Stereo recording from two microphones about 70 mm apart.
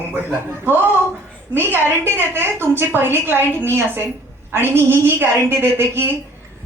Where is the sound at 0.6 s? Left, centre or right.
Right.